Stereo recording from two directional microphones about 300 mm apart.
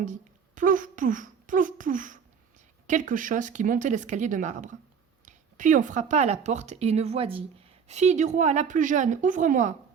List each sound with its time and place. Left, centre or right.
0.0 s speech: right